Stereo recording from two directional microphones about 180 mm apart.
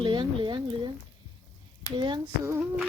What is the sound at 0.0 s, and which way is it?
Speech, 25° right (ahead or behind).